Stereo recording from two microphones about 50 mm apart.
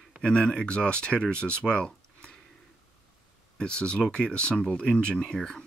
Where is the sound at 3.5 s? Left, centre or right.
Centre.